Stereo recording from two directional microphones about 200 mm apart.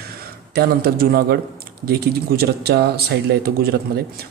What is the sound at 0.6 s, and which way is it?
Speech, 50° right (ahead or behind).